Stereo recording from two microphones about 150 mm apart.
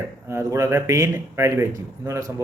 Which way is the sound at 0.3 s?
20° right (ahead or behind).